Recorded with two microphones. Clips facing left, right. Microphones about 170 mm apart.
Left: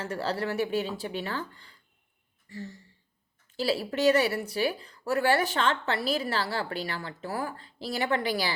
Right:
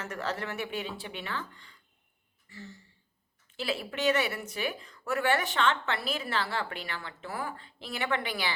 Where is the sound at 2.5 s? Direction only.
40° left (ahead or behind).